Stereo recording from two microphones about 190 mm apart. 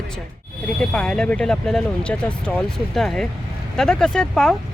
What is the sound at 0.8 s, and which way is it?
Speech, 5° left (ahead or behind).